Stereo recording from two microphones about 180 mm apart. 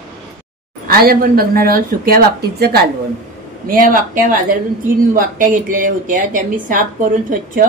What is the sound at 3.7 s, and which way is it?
A woman's voice, 50° right (ahead or behind).